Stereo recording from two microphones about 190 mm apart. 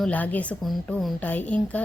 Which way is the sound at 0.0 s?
10° left (ahead or behind).